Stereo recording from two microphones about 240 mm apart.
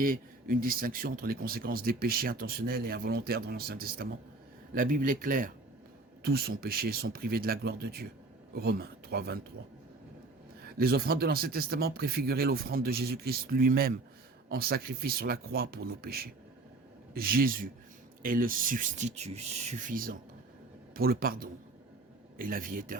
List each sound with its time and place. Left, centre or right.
0.0 s speech: right
10.7 s speech: right